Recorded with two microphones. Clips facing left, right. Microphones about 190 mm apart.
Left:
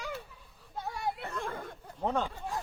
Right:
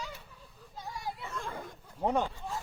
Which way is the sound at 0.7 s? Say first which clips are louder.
Left 5 dB; 60° left (ahead or behind).